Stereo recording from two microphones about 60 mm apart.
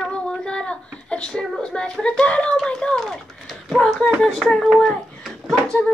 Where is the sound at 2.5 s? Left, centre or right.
Centre.